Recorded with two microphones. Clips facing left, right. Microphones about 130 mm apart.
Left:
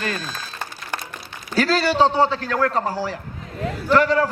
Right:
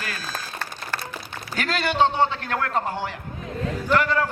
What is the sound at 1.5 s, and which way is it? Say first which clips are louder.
A man's voice: left 5 dB; 35° left (ahead or behind).